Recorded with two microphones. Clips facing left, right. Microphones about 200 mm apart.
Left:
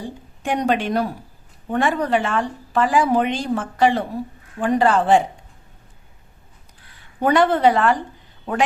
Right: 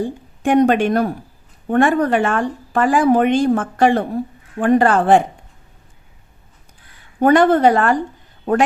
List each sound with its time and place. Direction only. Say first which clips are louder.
0.0 s a woman's voice: right 8 dB; 50° right (ahead or behind)
7.2 s speech: right 4 dB; 50° right (ahead or behind)